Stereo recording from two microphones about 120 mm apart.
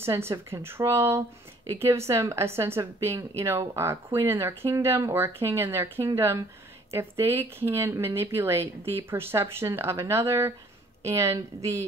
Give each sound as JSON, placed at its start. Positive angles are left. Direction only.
{"t": 0.0, "sound": "speech", "side_deg": -20}